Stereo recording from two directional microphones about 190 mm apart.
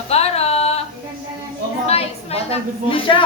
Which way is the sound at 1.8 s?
30° left (ahead or behind).